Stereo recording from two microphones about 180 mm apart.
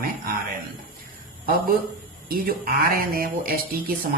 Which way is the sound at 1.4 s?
55° right (ahead or behind).